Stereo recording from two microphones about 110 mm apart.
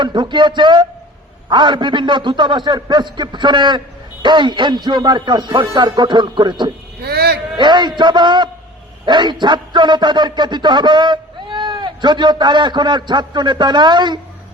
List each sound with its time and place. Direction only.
0.0 s a man's voice: 45° right (ahead or behind)